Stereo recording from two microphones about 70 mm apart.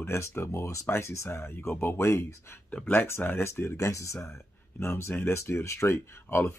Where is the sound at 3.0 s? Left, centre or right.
Left.